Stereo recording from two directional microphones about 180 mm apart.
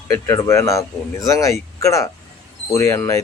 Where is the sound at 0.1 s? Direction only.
15° left (ahead or behind).